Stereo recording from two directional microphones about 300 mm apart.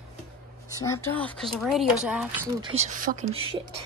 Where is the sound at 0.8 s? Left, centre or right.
Centre.